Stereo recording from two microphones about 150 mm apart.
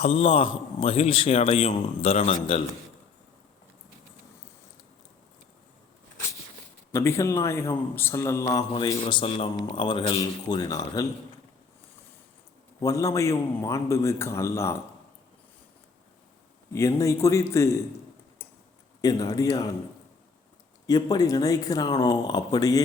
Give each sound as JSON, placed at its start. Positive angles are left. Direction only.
{"t": 0.0, "sound": "a man's voice", "side_deg": 40}
{"t": 6.9, "sound": "a man's voice", "side_deg": 20}
{"t": 8.4, "sound": "a man's voice", "side_deg": 30}
{"t": 12.8, "sound": "a man's voice", "side_deg": 20}
{"t": 16.7, "sound": "a man's voice", "side_deg": 20}
{"t": 19.0, "sound": "a man's voice", "side_deg": 25}
{"t": 20.8, "sound": "a man's voice", "side_deg": 25}